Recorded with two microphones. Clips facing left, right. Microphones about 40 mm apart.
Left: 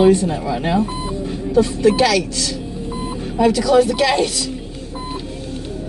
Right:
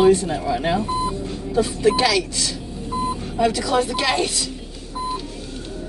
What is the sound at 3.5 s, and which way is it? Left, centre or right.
Speech, centre.